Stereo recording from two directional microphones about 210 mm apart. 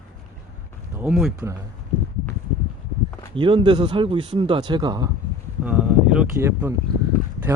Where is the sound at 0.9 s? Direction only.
10° right (ahead or behind).